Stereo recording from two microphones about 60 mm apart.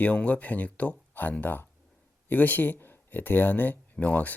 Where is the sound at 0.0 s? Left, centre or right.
Left.